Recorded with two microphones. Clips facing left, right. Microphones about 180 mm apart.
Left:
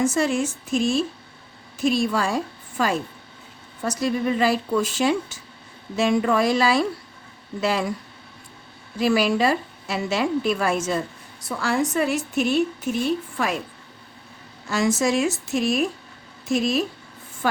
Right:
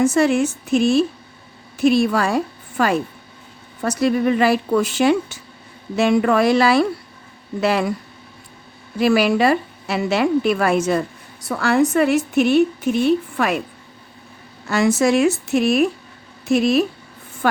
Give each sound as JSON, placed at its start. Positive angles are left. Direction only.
{"t": 0.0, "sound": "a woman's voice", "side_deg": -65}
{"t": 9.0, "sound": "a woman's voice", "side_deg": -65}
{"t": 14.7, "sound": "a woman's voice", "side_deg": -65}